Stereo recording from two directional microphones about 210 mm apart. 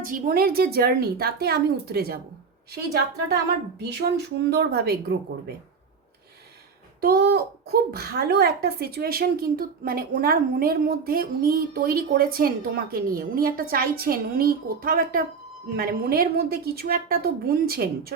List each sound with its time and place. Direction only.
0.0 s a child's voice: 45° right (ahead or behind)
7.0 s a child's voice: 50° right (ahead or behind)